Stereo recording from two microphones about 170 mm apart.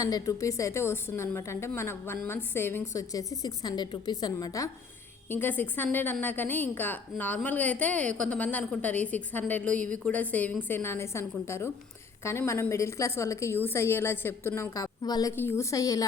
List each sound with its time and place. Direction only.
0.0 s a woman's voice: 20° left (ahead or behind)